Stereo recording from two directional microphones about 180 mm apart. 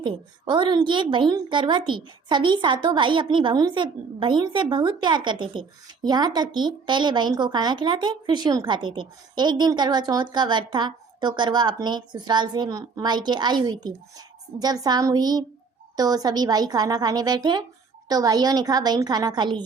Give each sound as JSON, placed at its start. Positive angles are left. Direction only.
{"t": 0.0, "sound": "a woman's voice", "side_deg": -25}